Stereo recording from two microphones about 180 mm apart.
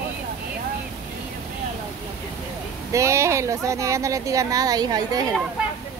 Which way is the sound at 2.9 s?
15° right (ahead or behind).